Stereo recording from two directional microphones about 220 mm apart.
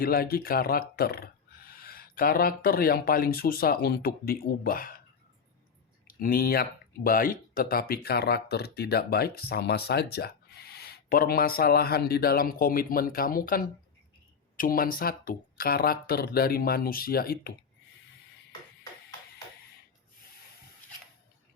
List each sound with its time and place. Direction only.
0.0 s speech: 45° left (ahead or behind)
6.1 s speech: 40° left (ahead or behind)